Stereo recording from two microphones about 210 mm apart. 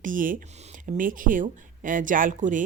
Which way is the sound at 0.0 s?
40° right (ahead or behind).